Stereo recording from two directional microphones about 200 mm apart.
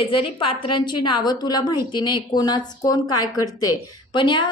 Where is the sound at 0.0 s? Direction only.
25° left (ahead or behind).